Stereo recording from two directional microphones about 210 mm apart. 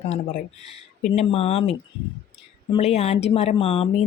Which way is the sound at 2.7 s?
30° left (ahead or behind).